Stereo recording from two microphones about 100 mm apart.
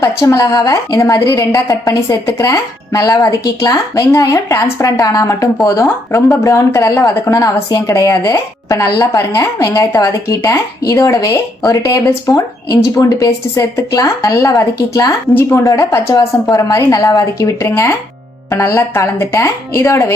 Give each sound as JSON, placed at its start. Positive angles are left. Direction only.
{"t": 0.0, "sound": "speech", "side_deg": 30}
{"t": 15.4, "sound": "a woman's voice", "side_deg": 25}